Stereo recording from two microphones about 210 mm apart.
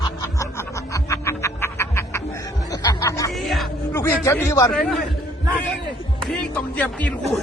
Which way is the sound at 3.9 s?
15° left (ahead or behind).